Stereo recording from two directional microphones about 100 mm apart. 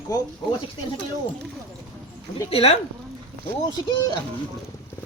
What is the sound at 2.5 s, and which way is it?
Speech, 75° left (ahead or behind).